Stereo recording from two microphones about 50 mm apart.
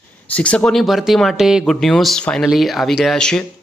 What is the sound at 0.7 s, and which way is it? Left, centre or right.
Speech, centre.